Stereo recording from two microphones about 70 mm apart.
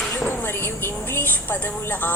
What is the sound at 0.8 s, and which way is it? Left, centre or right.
Speech, left.